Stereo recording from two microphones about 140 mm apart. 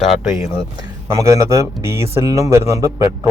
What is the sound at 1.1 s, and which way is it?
Speech, 25° right (ahead or behind).